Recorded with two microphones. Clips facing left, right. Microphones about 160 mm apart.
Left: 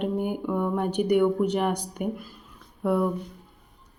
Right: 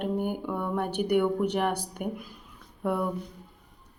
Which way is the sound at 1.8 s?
10° right (ahead or behind).